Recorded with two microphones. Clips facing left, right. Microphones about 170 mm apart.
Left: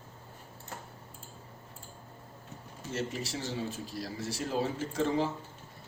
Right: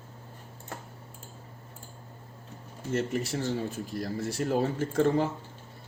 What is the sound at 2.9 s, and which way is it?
A man's voice, 55° right (ahead or behind).